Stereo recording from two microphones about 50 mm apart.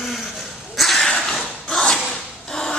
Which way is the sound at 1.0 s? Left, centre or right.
Centre.